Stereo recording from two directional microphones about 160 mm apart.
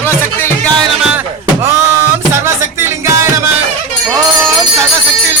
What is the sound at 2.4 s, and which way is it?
Music, 15° right (ahead or behind).